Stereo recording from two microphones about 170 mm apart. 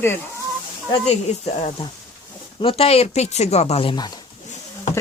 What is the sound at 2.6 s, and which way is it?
Speech, 35° left (ahead or behind).